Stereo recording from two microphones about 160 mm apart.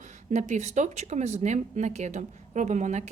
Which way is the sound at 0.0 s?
50° right (ahead or behind).